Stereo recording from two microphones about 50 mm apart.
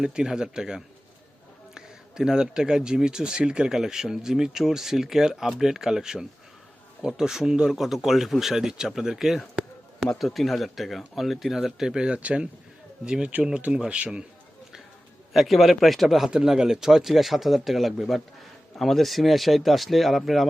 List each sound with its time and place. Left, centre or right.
0.0 s speech: centre
10.2 s a man's voice: centre
15.3 s speech: centre